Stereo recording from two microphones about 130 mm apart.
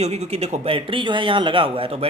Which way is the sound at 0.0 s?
55° right (ahead or behind).